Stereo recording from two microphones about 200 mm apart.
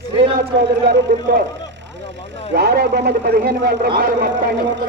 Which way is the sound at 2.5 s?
50° right (ahead or behind).